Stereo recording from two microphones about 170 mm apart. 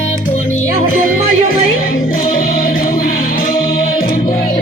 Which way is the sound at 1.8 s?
55° left (ahead or behind).